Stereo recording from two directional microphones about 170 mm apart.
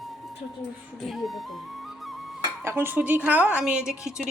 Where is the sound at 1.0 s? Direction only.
Centre (ahead or behind).